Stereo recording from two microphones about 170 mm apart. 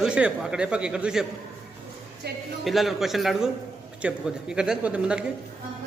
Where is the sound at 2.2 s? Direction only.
75° right (ahead or behind).